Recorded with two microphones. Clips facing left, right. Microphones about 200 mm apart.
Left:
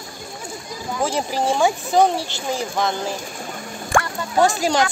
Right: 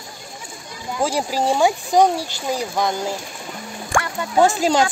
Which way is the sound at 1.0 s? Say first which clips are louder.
Right 1 dB; 10° right (ahead or behind).